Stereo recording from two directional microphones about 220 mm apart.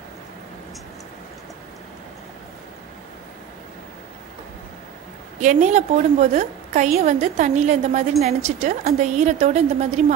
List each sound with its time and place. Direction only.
5.4 s a woman's voice: 35° right (ahead or behind)